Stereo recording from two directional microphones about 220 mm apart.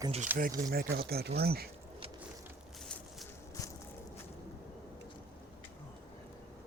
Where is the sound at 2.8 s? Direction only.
5° left (ahead or behind).